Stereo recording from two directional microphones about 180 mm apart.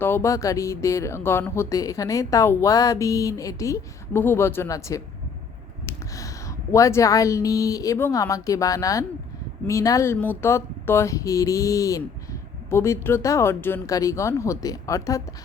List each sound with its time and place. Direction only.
0.0 s speech: 15° left (ahead or behind)